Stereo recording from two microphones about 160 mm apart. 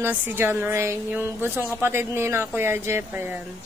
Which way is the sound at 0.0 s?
10° right (ahead or behind).